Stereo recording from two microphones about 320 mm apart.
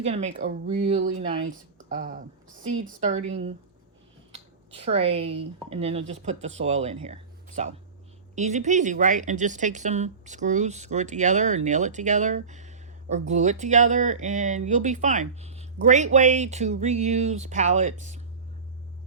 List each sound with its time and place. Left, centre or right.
0.0 s speech: centre
4.7 s speech: centre